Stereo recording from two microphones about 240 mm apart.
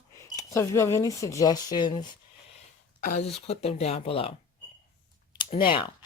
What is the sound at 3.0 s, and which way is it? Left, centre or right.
Speech, left.